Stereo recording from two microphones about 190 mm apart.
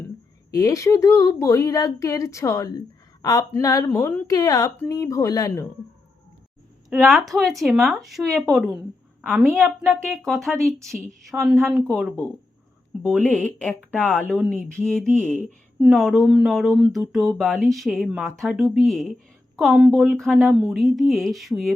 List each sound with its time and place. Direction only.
0.5 s speech: 20° left (ahead or behind)
7.0 s speech: centre (ahead or behind)
13.2 s speech: 5° left (ahead or behind)